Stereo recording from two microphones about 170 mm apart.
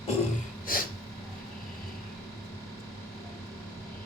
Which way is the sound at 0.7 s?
55° left (ahead or behind).